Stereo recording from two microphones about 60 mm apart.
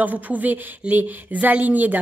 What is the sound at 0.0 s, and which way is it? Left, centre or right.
A woman's voice, right.